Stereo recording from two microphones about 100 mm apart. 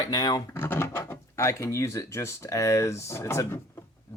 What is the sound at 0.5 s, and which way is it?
Speech, 20° left (ahead or behind).